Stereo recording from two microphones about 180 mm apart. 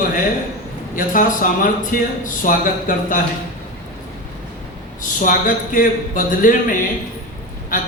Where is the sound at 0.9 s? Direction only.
50° left (ahead or behind).